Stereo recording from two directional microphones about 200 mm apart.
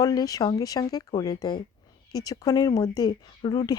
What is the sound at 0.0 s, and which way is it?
Speech, 20° left (ahead or behind).